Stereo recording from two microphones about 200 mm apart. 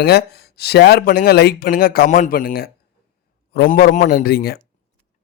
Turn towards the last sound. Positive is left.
turn(degrees=50)  # may be behind; listen again after turning